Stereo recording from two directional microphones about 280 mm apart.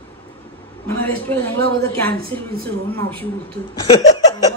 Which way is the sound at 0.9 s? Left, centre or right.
Centre.